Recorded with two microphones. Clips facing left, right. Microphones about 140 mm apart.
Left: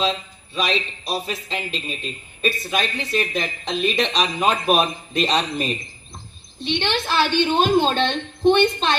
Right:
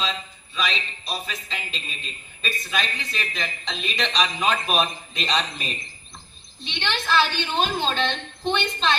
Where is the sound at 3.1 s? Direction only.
50° left (ahead or behind).